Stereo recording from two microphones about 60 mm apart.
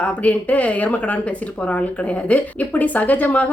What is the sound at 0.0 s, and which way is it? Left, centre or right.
Speech, left.